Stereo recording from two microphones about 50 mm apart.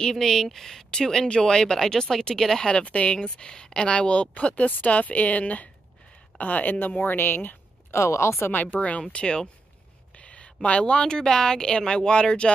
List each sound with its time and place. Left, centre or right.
0.0 s speech: centre
2.7 s speech: left
7.9 s speech: left
8.5 s speech: left; by 12.4 s centre